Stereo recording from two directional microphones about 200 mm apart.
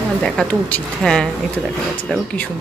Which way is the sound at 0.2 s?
5° left (ahead or behind).